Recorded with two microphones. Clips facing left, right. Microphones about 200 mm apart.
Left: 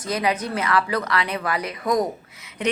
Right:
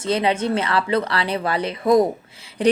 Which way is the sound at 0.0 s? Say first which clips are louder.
Right 4 dB; 30° right (ahead or behind).